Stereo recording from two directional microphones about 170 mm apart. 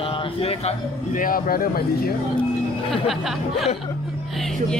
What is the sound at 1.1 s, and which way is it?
Speech, 55° left (ahead or behind).